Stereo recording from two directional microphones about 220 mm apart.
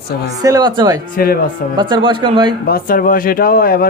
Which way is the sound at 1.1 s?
45° left (ahead or behind).